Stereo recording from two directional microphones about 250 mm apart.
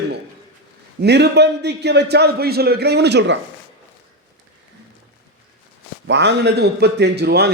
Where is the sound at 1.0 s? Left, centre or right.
Right.